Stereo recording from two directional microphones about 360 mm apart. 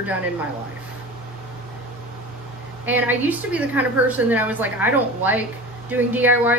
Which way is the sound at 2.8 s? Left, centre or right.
Centre.